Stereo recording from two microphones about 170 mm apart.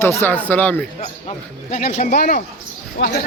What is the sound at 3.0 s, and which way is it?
Speech, 90° left.